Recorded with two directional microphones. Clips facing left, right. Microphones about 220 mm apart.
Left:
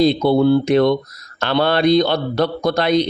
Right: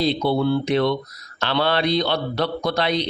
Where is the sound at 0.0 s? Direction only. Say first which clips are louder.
Left 6 dB; 45° left (ahead or behind).